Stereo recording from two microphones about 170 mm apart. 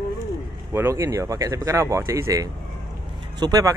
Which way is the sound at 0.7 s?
15° right (ahead or behind).